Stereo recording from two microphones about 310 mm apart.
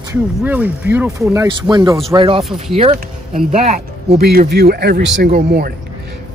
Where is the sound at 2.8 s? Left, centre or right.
Centre.